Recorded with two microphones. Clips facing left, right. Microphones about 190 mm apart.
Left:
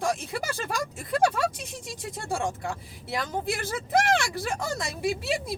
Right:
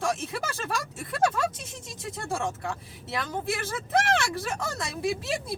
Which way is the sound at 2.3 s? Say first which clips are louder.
Left 1 dB; 15° left (ahead or behind).